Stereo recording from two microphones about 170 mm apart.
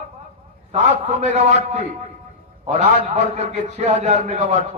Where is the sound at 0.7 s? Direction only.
45° right (ahead or behind).